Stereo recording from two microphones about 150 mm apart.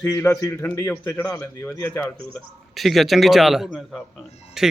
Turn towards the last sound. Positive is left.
turn(degrees=-5)  # may be behind; listen again after turning